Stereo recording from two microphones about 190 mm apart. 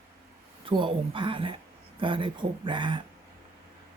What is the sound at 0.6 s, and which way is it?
Speech, 25° right (ahead or behind).